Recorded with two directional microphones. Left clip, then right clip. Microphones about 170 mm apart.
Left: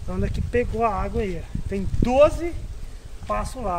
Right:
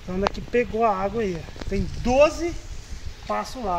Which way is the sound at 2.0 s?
10° right (ahead or behind).